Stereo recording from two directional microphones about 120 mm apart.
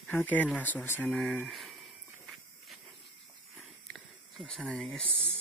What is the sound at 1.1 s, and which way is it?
Speech, centre (ahead or behind).